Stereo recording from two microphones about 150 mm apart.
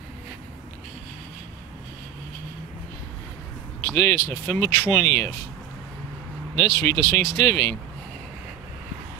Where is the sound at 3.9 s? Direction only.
15° left (ahead or behind).